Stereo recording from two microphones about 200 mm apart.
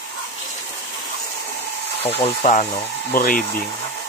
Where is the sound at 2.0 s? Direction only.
30° left (ahead or behind).